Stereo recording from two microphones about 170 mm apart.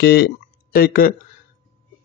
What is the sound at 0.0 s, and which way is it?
Speech, 70° left (ahead or behind).